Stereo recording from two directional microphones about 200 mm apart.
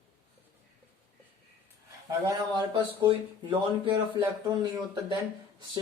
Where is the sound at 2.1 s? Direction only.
15° right (ahead or behind).